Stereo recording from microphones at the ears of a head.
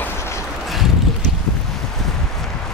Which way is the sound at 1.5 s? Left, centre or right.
Left.